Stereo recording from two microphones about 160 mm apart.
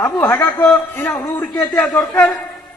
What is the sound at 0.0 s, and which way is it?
Speech, 15° left (ahead or behind).